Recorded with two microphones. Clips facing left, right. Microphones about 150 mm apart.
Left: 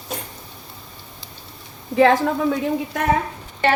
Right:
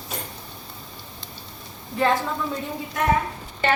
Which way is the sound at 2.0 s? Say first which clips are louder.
Left 7 dB; 75° left (ahead or behind).